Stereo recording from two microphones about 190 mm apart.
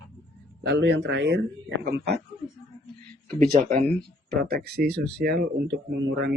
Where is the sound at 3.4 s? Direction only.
45° right (ahead or behind).